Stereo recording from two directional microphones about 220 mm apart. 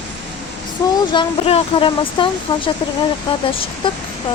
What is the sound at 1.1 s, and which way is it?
Speech, 25° left (ahead or behind).